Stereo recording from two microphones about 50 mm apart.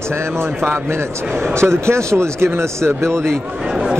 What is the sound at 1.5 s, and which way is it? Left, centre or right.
Speech, right.